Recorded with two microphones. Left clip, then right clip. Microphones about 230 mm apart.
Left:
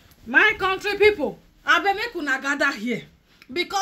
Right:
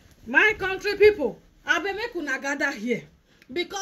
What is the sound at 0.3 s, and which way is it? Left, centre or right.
A woman's voice, centre.